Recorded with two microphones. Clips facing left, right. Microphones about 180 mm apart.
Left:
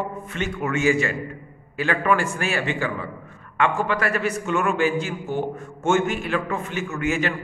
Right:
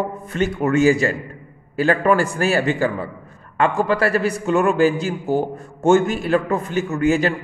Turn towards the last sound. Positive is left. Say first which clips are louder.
# right 6 dB
turn(degrees=-35)  # may be behind; listen again after turning